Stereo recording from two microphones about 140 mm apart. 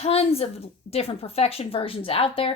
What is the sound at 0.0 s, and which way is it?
Speech, 45° left (ahead or behind).